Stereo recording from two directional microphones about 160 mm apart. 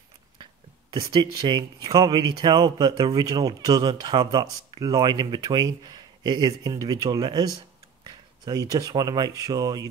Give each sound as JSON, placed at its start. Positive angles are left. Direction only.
{"t": 0.4, "sound": "speech", "side_deg": -30}